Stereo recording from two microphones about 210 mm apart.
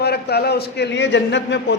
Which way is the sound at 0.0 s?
50° left (ahead or behind).